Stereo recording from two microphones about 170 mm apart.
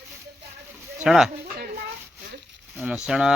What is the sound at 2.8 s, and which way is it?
Speech, 5° right (ahead or behind).